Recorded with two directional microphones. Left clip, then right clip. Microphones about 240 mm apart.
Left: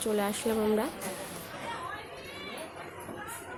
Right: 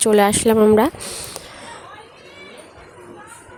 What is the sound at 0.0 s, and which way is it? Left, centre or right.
Speech, right.